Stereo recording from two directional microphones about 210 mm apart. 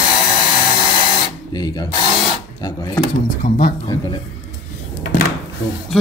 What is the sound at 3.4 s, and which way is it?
Speech, 35° left (ahead or behind).